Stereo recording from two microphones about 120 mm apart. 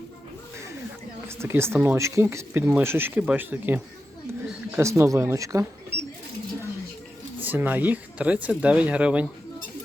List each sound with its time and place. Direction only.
1.4 s speech: 20° right (ahead or behind)
7.4 s speech: 15° right (ahead or behind)